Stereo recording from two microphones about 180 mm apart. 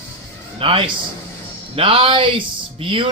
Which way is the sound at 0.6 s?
30° right (ahead or behind).